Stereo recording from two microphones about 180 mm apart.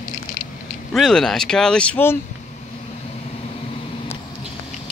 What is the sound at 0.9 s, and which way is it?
Speech, centre (ahead or behind).